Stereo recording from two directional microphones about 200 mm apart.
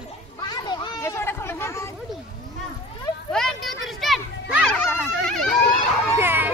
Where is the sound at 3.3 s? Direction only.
Centre (ahead or behind).